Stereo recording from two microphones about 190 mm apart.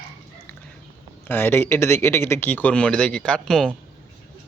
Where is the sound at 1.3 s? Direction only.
10° left (ahead or behind).